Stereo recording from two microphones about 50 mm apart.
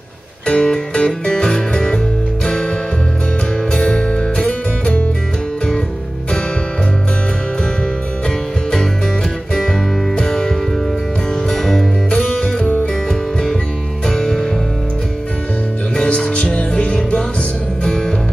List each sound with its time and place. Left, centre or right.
0.5 s music: centre
3.7 s music: centre
9.5 s music: centre
16.0 s music: left